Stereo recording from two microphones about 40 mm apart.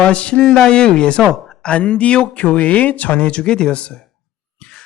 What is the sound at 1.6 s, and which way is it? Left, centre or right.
Speech, left.